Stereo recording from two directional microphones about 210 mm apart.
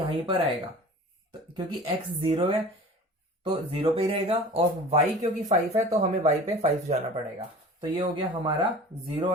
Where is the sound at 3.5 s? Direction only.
25° right (ahead or behind).